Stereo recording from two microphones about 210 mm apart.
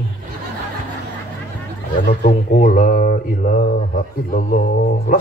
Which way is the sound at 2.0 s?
45° left (ahead or behind).